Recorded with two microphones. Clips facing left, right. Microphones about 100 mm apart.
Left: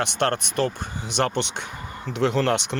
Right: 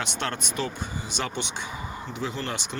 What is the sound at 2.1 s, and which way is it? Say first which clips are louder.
Speech: left 12 dB; 75° left (ahead or behind).